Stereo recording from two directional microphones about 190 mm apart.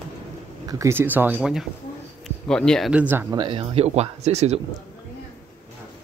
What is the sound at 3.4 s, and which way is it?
Speech, 25° right (ahead or behind).